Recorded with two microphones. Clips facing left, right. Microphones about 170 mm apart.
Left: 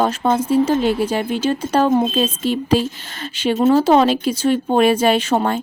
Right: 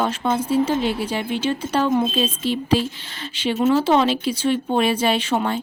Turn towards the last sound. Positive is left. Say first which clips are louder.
# left 4 dB
turn(degrees=45)  # may be behind; listen again after turning